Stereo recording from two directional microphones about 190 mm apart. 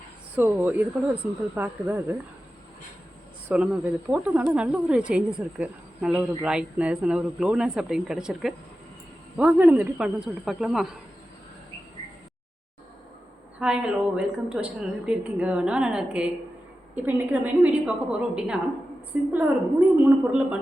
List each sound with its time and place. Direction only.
0.3 s a woman's voice: 10° right (ahead or behind)
3.5 s speech: 5° right (ahead or behind)
13.6 s a woman's voice: 5° right (ahead or behind)